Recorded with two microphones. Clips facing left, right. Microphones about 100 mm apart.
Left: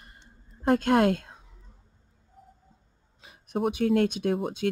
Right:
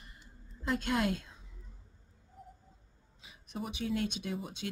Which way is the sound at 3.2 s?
55° left (ahead or behind).